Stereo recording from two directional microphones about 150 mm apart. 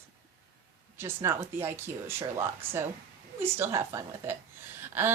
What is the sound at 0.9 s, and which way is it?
Speech, 15° right (ahead or behind).